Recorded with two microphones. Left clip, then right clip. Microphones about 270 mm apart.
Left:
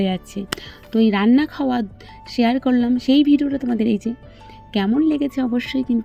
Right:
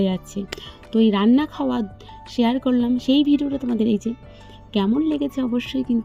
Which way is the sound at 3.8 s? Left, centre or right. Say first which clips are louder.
Right 2 dB; left.